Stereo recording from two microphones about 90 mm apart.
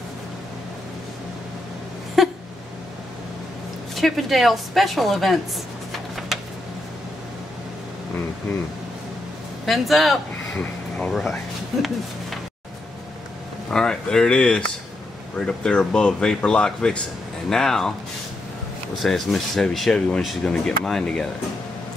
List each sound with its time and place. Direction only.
2.2 s a sound: centre (ahead or behind)
3.9 s speech: centre (ahead or behind)
6.1 s a sound: centre (ahead or behind)
9.7 s speech: centre (ahead or behind)
13.7 s speech: 5° left (ahead or behind)
18.9 s speech: centre (ahead or behind)